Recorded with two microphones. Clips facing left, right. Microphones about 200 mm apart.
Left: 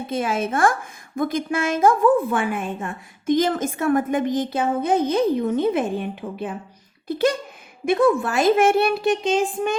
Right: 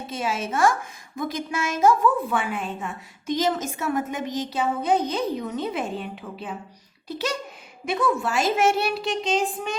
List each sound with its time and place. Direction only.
0.1 s a woman's voice: 55° left (ahead or behind)